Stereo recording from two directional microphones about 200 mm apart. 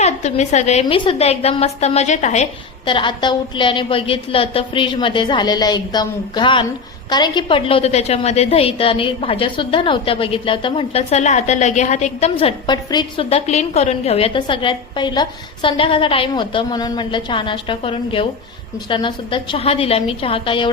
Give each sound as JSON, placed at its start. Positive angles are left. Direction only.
{"t": 0.0, "sound": "a woman's voice", "side_deg": 35}